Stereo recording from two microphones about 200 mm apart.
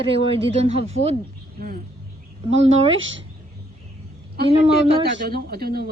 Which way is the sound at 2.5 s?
30° right (ahead or behind).